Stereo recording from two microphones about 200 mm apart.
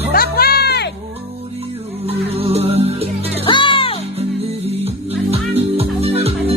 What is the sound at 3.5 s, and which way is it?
Music, 25° left (ahead or behind).